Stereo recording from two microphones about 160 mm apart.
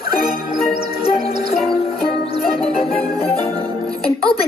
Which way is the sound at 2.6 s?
40° left (ahead or behind).